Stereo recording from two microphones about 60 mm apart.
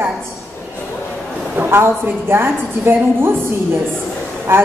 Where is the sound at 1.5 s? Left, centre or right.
Right.